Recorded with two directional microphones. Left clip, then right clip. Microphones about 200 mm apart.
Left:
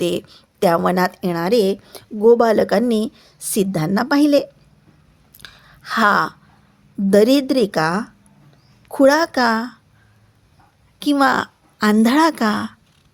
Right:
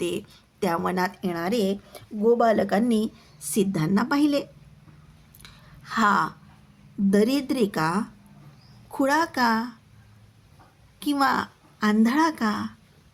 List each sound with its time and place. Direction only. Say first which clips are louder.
0.0 s a woman's voice: left 8 dB; 45° left (ahead or behind)
5.4 s a sound: left 9 dB; 45° left (ahead or behind)
7.1 s a woman's voice: left 10 dB; 50° left (ahead or behind)
11.0 s a woman's voice: left 7 dB; 45° left (ahead or behind)